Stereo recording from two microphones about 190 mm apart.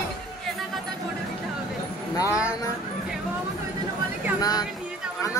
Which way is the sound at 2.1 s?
15° left (ahead or behind).